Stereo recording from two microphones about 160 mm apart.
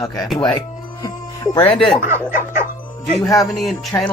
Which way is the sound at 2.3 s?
55° left (ahead or behind).